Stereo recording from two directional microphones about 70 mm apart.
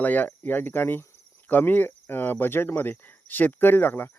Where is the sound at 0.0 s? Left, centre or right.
Left.